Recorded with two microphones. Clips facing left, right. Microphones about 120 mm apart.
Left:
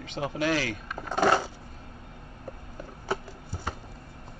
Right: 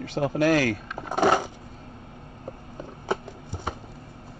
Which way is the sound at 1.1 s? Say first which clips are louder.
Right 2 dB; 15° right (ahead or behind).